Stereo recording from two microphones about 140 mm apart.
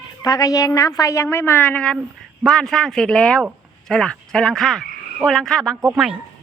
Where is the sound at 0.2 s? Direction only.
25° left (ahead or behind); by 3.4 s 5° left (ahead or behind).